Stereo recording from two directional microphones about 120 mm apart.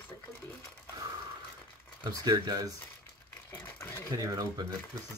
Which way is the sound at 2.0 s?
30° right (ahead or behind).